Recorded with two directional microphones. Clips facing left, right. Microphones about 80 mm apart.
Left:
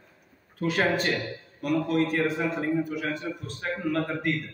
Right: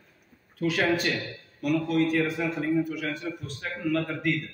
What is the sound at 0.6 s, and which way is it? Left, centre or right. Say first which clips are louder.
A man's voice: even; left.